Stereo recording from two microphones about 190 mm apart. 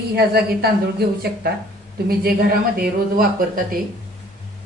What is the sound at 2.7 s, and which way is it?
Speech, 50° right (ahead or behind).